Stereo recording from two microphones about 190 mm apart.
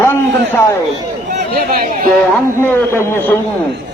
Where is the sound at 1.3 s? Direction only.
50° right (ahead or behind).